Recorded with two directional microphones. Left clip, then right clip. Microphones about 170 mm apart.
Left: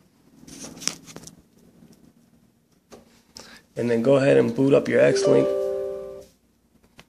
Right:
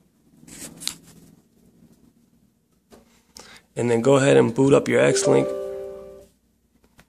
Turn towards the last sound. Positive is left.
turn(degrees=-10)  # may be behind; listen again after turning